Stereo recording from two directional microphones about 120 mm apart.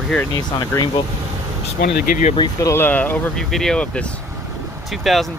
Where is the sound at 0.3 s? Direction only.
35° left (ahead or behind).